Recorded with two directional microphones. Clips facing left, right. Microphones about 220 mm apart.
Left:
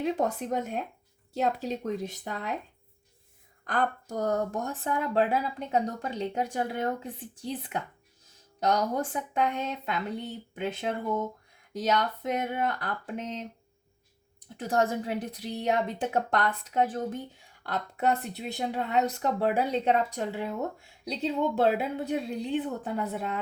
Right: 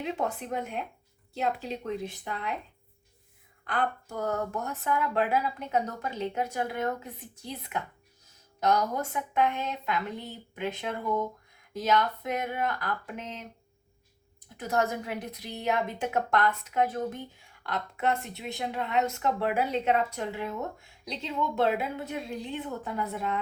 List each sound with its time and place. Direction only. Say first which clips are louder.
0.0 s speech: left 4 dB; 40° left (ahead or behind)
3.6 s speech: left 1 dB; 40° left (ahead or behind)
14.5 s speech: left 2 dB; 30° left (ahead or behind)